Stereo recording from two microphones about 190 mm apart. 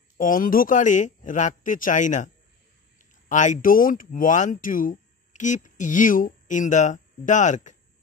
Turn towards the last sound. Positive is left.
turn(degrees=40)  # may be behind; listen again after turning